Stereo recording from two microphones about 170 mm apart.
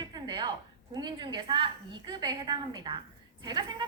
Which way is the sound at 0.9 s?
25° right (ahead or behind).